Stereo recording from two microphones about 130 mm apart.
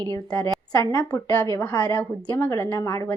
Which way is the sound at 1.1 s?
15° left (ahead or behind).